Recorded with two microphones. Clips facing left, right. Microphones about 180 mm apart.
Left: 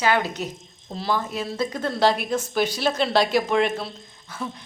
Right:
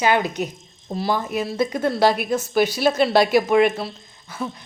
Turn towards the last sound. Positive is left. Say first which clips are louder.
# right 3 dB
turn(degrees=-5)  # may be behind; listen again after turning